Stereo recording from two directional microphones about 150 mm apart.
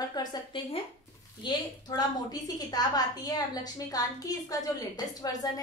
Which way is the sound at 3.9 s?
25° left (ahead or behind).